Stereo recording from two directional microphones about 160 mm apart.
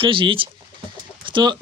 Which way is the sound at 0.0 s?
35° right (ahead or behind).